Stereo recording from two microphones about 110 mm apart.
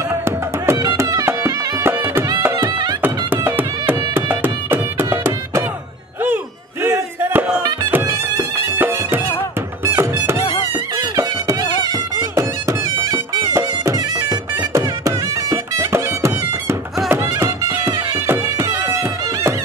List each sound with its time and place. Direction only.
0.8 s music: 30° right (ahead or behind)
6.8 s a sound: 15° right (ahead or behind)
7.9 s music: 20° right (ahead or behind)
12.2 s music: 30° right (ahead or behind)